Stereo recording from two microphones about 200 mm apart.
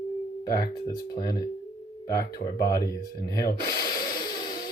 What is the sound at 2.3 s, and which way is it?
Speech, 20° left (ahead or behind).